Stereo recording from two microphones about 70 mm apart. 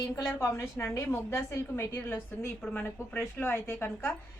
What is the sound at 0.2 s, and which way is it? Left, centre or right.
A woman's voice, left.